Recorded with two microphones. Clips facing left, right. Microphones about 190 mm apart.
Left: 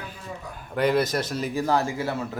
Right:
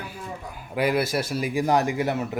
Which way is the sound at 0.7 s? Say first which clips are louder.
Left 1 dB; 10° right (ahead or behind).